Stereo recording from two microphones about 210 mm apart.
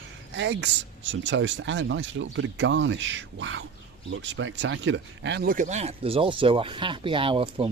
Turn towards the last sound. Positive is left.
turn(degrees=-25)  # may be behind; listen again after turning